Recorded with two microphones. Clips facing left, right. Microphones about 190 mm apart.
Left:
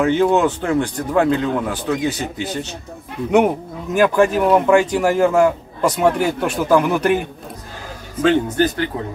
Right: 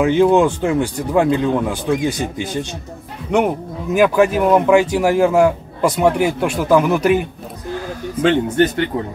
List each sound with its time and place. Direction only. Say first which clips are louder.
0.0 s speech: right 2 dB; 10° right (ahead or behind)
3.3 s speech: left 2 dB; 5° left (ahead or behind)
3.9 s speech: right 1 dB; 5° right (ahead or behind)
8.2 s speech: right 1 dB; 25° right (ahead or behind)